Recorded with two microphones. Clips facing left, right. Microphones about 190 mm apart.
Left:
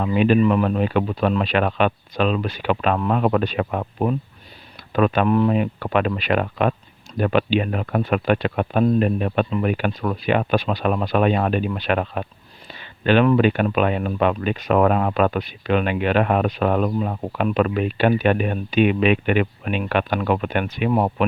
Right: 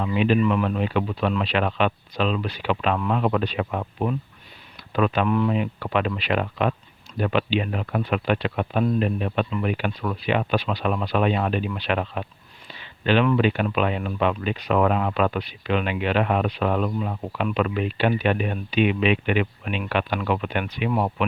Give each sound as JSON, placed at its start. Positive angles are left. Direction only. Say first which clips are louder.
{"t": 0.0, "sound": "speech", "louder": "left 4 dB", "side_deg": 50}